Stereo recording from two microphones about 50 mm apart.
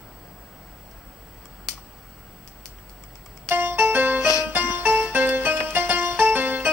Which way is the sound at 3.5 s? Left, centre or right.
Right.